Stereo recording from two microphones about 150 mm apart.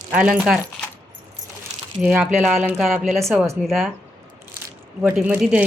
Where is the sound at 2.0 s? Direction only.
5° right (ahead or behind).